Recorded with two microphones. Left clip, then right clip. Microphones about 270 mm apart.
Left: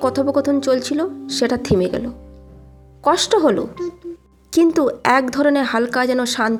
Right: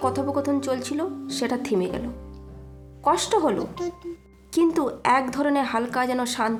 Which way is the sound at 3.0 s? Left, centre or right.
Centre.